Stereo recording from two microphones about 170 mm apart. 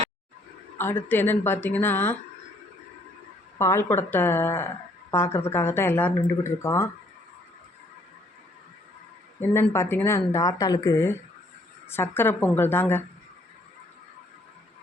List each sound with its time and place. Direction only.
0.8 s speech: 10° left (ahead or behind)
3.6 s speech: 15° left (ahead or behind)
9.4 s speech: 15° left (ahead or behind)